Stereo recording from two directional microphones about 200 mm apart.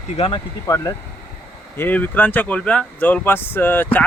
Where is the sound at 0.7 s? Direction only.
15° left (ahead or behind).